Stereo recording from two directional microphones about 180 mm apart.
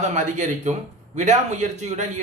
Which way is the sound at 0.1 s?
40° right (ahead or behind).